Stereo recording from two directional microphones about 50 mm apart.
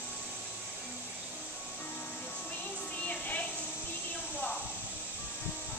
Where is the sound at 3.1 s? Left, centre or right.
Left.